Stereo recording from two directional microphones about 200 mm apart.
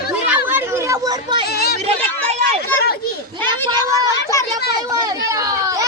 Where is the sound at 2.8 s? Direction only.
50° left (ahead or behind).